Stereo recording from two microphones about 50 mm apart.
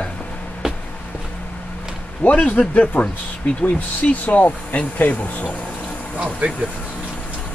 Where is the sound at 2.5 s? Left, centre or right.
Left.